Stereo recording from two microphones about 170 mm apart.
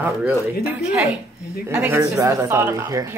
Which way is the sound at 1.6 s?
10° right (ahead or behind).